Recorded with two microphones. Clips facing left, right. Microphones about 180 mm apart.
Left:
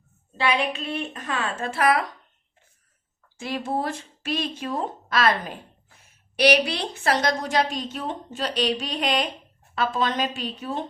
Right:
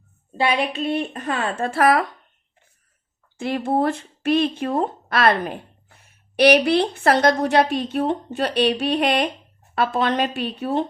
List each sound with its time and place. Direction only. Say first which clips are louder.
1.1 s a woman's voice: right 4 dB; 60° right (ahead or behind)
3.3 s a woman's voice: right 6 dB; 60° right (ahead or behind)